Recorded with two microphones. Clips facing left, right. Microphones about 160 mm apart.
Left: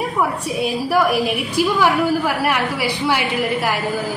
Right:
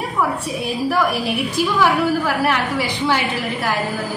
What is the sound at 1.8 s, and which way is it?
A woman's voice, 10° left (ahead or behind).